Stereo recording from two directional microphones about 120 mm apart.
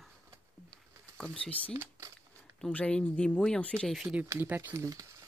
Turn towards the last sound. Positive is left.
turn(degrees=-25)  # may be behind; listen again after turning